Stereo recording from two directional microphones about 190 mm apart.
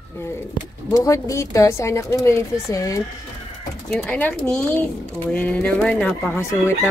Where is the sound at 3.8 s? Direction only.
5° left (ahead or behind).